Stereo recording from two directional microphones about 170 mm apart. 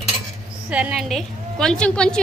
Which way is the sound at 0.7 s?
5° right (ahead or behind).